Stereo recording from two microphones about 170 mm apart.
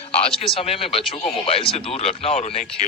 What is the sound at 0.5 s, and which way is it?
Speech, 35° left (ahead or behind).